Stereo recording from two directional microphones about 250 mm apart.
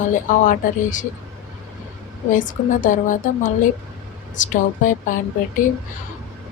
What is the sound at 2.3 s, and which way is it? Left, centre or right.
Speech, left.